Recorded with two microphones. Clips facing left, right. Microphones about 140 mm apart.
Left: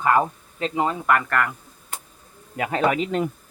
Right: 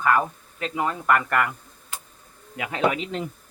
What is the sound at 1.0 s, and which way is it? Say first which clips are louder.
Speech: even; centre (ahead or behind).